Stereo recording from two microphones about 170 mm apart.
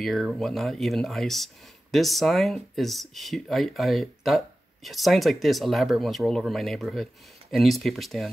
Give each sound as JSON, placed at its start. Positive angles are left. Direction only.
{"t": 0.0, "sound": "speech", "side_deg": 0}